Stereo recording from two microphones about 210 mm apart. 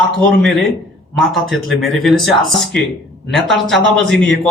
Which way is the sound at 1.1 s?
Centre (ahead or behind).